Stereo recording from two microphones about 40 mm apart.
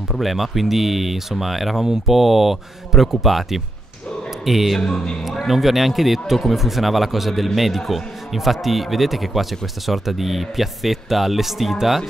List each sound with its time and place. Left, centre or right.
0.1 s speech: centre
4.7 s a man's voice: centre
5.3 s speech: centre